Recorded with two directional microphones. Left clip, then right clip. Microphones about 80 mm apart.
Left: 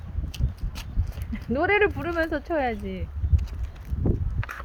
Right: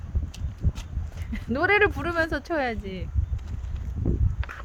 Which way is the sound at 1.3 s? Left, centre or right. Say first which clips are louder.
Right 1 dB; right.